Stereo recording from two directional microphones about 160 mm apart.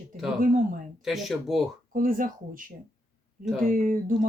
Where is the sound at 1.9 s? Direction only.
60° right (ahead or behind).